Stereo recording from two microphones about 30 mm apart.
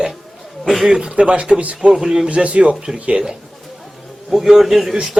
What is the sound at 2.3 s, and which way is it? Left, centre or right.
Speech, right.